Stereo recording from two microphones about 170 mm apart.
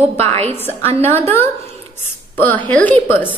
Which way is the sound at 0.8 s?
35° right (ahead or behind).